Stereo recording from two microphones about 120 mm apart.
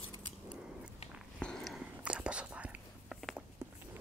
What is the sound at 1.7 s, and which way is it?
Whispering, 10° right (ahead or behind).